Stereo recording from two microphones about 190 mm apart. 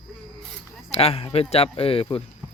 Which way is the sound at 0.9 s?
30° left (ahead or behind).